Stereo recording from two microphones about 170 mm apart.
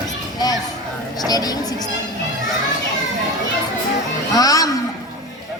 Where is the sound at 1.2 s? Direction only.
20° left (ahead or behind).